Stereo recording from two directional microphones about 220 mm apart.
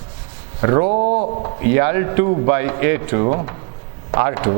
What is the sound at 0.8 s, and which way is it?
Speech, 35° right (ahead or behind).